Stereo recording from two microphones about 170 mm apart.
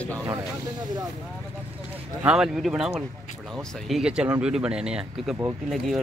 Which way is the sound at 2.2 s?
5° right (ahead or behind).